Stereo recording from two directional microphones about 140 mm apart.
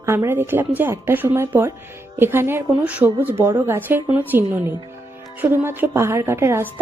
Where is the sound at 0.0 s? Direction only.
20° right (ahead or behind).